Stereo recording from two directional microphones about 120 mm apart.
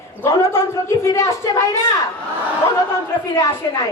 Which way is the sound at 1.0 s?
25° left (ahead or behind).